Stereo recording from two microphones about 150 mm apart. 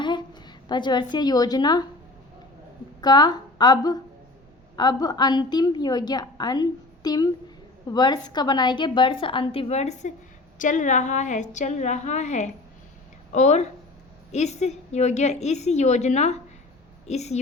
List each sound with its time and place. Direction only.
0.0 s a woman's voice: 30° left (ahead or behind)
3.0 s a woman's voice: 25° left (ahead or behind); by 17.4 s 45° left (ahead or behind)